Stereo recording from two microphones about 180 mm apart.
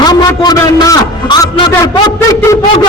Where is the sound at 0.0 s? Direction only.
20° left (ahead or behind).